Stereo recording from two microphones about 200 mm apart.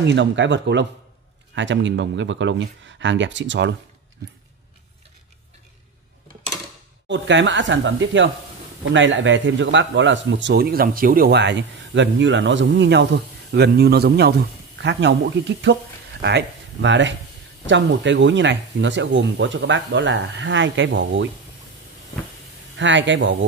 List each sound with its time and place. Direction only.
0.0 s speech: 60° right (ahead or behind)
7.1 s speech: 65° right (ahead or behind)
22.8 s speech: 65° right (ahead or behind)